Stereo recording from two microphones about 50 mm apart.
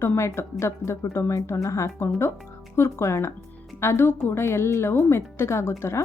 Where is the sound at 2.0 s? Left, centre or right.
Left.